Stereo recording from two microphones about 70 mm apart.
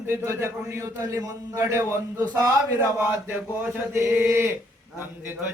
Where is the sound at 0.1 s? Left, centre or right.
Right.